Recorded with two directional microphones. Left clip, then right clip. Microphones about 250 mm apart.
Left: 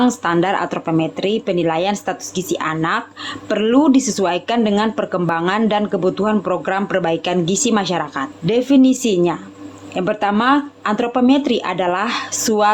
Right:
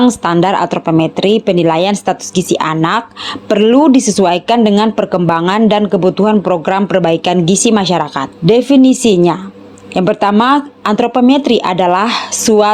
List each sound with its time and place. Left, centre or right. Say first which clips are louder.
0.0 s speech: right 6 dB; right